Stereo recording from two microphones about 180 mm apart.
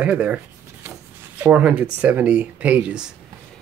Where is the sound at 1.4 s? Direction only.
10° right (ahead or behind).